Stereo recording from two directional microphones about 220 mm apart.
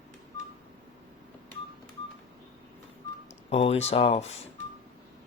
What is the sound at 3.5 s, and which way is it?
Speech, 25° left (ahead or behind).